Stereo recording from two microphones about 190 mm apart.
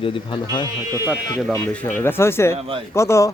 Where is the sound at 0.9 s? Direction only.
15° right (ahead or behind).